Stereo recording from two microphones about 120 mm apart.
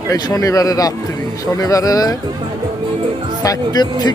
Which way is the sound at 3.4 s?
35° left (ahead or behind).